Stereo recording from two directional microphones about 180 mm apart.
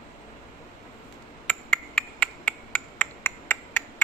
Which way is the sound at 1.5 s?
5° left (ahead or behind).